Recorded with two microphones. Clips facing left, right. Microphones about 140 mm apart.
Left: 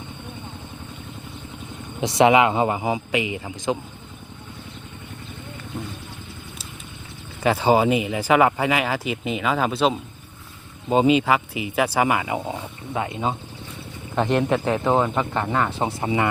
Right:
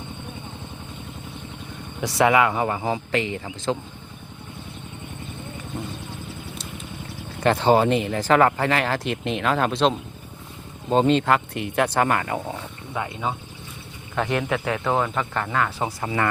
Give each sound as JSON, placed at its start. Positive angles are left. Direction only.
{"t": 2.0, "sound": "a man's voice", "side_deg": 20}
{"t": 7.4, "sound": "a man's voice", "side_deg": 5}